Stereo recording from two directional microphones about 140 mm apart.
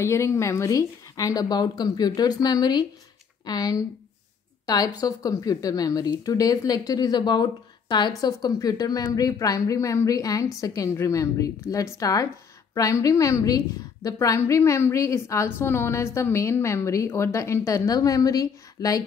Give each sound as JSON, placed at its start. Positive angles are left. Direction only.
{"t": 0.0, "sound": "a woman's voice", "side_deg": 20}